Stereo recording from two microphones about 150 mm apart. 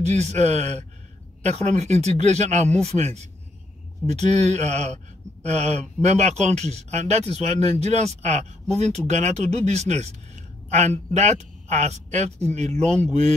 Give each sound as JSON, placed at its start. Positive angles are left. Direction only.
{"t": 0.0, "sound": "speech", "side_deg": -50}